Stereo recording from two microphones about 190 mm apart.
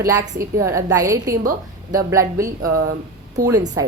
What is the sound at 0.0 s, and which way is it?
A woman's voice, 15° right (ahead or behind).